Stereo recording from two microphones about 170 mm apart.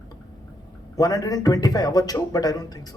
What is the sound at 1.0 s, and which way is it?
Speech, 20° left (ahead or behind).